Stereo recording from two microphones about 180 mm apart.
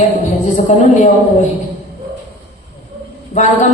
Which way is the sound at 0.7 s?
40° left (ahead or behind).